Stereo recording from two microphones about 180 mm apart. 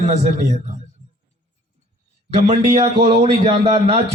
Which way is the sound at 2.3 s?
35° right (ahead or behind).